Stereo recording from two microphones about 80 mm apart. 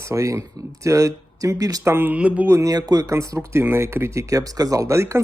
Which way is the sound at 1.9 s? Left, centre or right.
Right.